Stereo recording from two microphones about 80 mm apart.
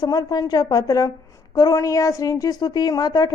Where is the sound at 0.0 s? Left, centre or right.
Left.